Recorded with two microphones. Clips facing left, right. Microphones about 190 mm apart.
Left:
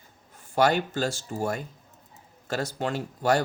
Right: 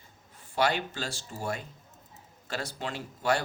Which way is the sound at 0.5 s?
45° left (ahead or behind).